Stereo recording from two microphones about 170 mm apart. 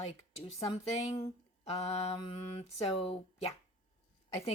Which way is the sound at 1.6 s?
35° left (ahead or behind).